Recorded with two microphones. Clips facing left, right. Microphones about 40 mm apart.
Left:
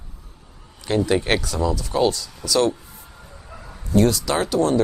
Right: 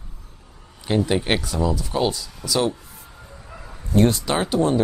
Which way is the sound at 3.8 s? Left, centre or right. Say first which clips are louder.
Even; right.